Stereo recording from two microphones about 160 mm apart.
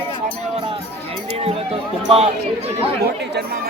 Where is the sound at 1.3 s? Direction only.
40° right (ahead or behind).